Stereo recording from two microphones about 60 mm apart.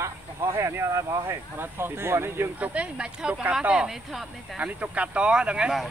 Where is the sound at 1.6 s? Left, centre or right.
Right.